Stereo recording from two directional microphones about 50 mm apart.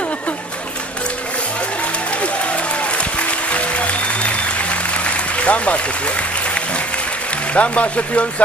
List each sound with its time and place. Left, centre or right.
2.2 s music: left
5.1 s applause: left
7.5 s speech: left